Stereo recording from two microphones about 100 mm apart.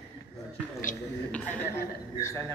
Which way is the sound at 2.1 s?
35° left (ahead or behind).